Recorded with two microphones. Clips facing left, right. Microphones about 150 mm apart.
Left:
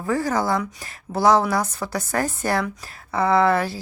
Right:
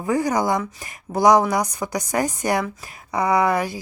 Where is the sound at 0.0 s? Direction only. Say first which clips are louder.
Right 2 dB; 15° right (ahead or behind).